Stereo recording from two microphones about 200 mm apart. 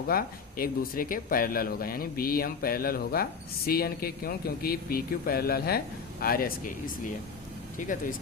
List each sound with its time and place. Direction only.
0.1 s speech: 45° left (ahead or behind)